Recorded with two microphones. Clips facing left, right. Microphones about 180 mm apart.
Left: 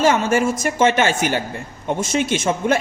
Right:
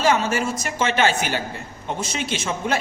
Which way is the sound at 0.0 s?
50° left (ahead or behind).